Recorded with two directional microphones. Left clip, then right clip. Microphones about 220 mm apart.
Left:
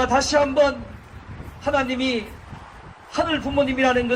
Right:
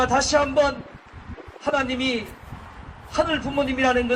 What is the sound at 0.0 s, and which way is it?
A man's voice, 30° right (ahead or behind).